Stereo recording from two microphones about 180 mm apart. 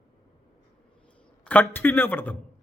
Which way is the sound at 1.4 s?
10° left (ahead or behind).